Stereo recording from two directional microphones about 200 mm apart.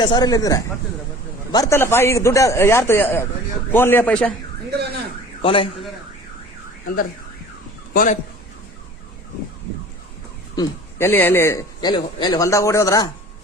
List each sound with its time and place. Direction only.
0.0 s a man's voice: 20° left (ahead or behind); by 4.4 s 5° left (ahead or behind)
5.4 s a man's voice: 25° left (ahead or behind)
6.8 s car alarm: 45° left (ahead or behind)
7.9 s speech: 40° left (ahead or behind)
10.5 s a man's voice: 15° left (ahead or behind)